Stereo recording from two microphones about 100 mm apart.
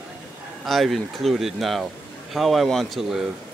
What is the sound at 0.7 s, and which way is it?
Speech, centre (ahead or behind).